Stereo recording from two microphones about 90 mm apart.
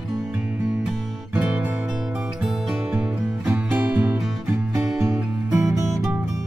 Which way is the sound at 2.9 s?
15° right (ahead or behind).